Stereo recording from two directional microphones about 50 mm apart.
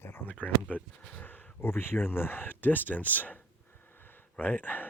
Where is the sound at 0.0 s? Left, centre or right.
Left.